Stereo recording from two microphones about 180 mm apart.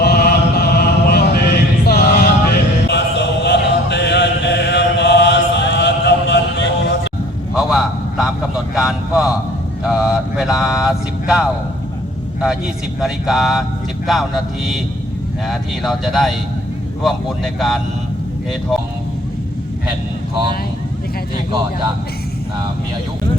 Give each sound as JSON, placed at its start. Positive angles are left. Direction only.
{"t": 0.0, "sound": "chant", "side_deg": 60}
{"t": 7.5, "sound": "a sound", "side_deg": -5}
{"t": 9.8, "sound": "mantra", "side_deg": -5}
{"t": 12.4, "sound": "speech", "side_deg": -5}